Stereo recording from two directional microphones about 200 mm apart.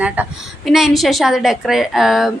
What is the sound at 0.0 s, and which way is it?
A woman's voice, 5° right (ahead or behind).